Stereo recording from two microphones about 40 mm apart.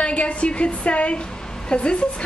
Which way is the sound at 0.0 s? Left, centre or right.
Left.